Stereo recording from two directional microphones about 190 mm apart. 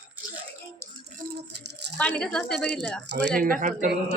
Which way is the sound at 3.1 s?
65° right (ahead or behind).